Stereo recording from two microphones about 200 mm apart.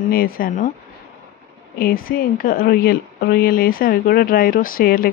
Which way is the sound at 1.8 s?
45° left (ahead or behind).